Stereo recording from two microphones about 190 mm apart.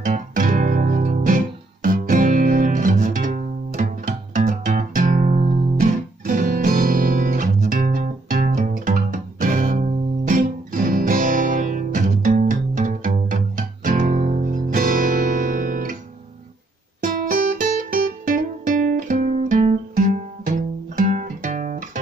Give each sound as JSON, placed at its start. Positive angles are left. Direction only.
{"t": 0.0, "sound": "guitar", "side_deg": -40}
{"t": 17.0, "sound": "music", "side_deg": -45}